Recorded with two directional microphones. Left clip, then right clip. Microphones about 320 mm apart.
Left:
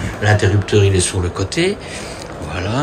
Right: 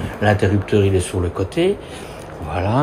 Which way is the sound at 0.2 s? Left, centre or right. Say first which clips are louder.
Left 1 dB; centre.